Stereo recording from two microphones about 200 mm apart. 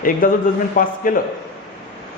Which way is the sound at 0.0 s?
45° left (ahead or behind).